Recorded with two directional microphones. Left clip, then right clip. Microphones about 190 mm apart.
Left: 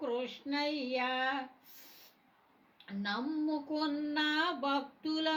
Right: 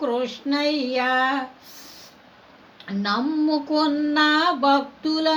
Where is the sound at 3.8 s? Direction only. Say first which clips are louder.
Right 15 dB; 35° right (ahead or behind).